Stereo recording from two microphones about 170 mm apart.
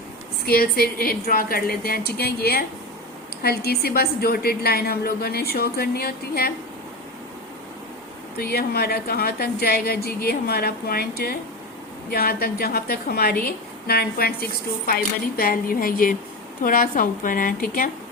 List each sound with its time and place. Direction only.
0.4 s a woman's voice: 60° left (ahead or behind)
8.4 s a woman's voice: 65° left (ahead or behind)